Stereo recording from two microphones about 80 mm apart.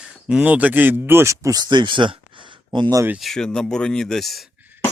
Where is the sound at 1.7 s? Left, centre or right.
Right.